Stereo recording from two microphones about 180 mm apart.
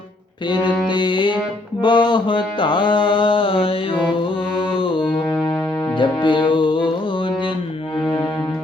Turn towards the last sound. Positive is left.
turn(degrees=25)  # may be behind; listen again after turning